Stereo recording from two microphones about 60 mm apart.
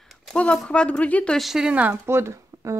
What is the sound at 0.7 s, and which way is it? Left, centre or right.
Speech, centre.